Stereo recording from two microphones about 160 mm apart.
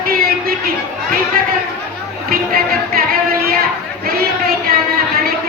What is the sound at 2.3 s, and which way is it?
Music, 65° right (ahead or behind).